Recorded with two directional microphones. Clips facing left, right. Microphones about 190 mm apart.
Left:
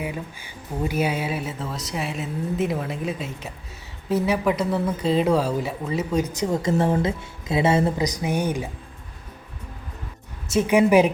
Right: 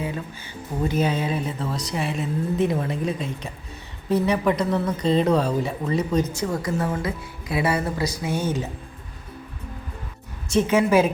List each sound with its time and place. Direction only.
0.0 s speech: 10° left (ahead or behind)
10.5 s speech: 10° left (ahead or behind)